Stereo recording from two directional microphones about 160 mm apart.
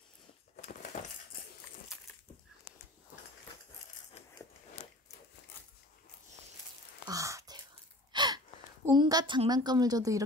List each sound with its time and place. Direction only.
7.1 s sigh: 20° right (ahead or behind)
8.1 s gasp: 30° right (ahead or behind)
8.9 s a woman's voice: 30° right (ahead or behind)